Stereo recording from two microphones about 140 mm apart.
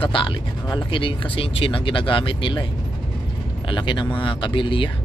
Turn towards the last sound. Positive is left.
turn(degrees=35)  # may be behind; listen again after turning